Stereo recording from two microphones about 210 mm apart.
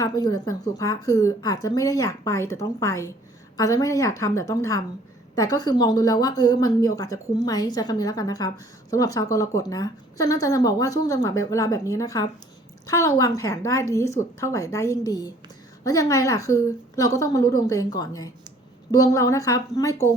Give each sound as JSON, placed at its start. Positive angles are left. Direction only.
{"t": 0.0, "sound": "a woman's voice", "side_deg": 15}